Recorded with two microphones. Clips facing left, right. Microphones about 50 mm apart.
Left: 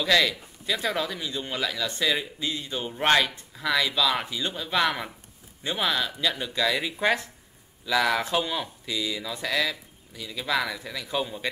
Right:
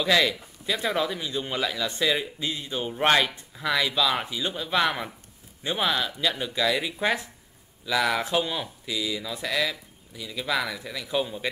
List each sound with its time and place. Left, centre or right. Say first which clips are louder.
0.0 s speech: even; centre